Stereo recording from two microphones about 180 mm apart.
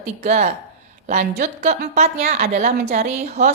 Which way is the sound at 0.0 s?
40° right (ahead or behind).